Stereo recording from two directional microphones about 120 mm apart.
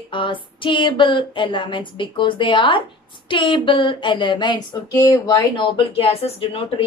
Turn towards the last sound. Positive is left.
turn(degrees=50)  # may be behind; listen again after turning